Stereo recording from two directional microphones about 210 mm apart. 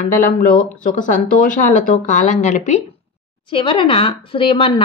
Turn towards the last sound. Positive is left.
turn(degrees=25)  # may be behind; listen again after turning